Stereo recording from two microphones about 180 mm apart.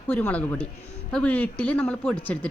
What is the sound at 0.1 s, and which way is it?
Speech, 10° left (ahead or behind).